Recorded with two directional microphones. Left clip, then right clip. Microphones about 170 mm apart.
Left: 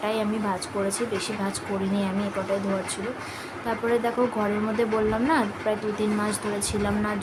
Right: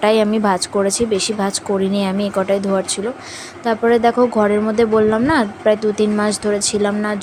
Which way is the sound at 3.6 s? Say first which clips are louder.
Right 11 dB; 45° right (ahead or behind).